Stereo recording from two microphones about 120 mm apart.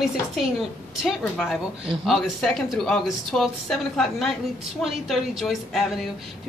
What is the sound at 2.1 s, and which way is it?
Speech, 5° left (ahead or behind).